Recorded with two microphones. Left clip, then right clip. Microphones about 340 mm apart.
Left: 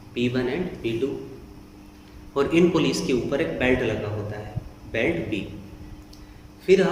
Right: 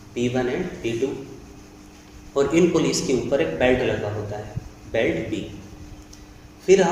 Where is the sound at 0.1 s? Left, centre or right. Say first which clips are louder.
Right 2 dB; centre.